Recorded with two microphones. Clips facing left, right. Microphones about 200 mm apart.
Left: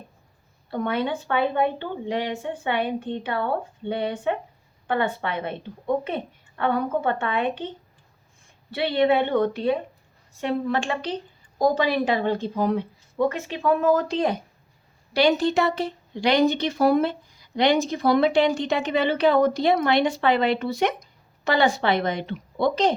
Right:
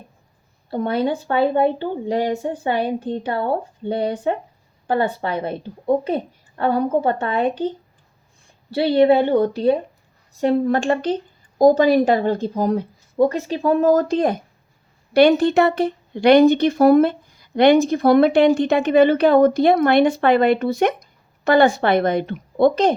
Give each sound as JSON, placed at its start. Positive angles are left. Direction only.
{"t": 0.7, "sound": "a woman's voice", "side_deg": -35}
{"t": 8.7, "sound": "a woman's voice", "side_deg": -35}